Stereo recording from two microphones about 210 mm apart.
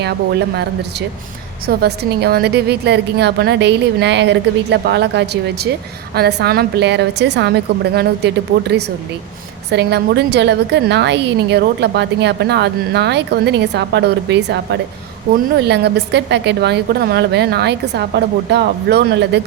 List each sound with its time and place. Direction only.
0.0 s a woman's voice: 50° right (ahead or behind)